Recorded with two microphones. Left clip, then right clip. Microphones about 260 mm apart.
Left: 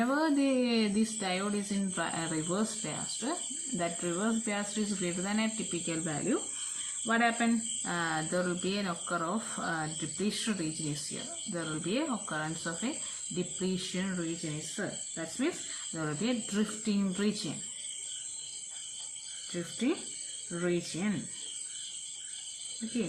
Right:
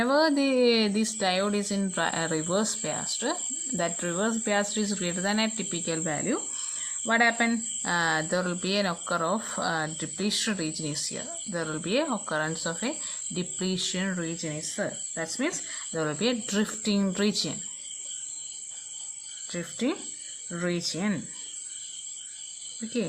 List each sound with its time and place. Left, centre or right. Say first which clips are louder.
0.0 s speech: right 6 dB; right
19.5 s speech: right 3 dB; right